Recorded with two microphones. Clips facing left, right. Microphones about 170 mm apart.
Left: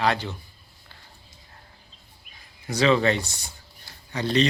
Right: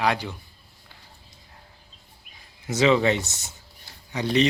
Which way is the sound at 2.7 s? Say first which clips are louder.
Right 1 dB; 20° right (ahead or behind).